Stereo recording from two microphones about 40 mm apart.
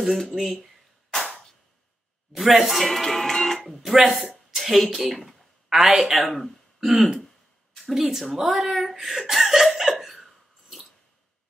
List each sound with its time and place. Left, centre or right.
0.0 s speech: centre
2.3 s speech: centre
5.7 s a woman's voice: centre
6.1 s speech: centre
6.8 s a woman's voice: centre
8.4 s chuckle: centre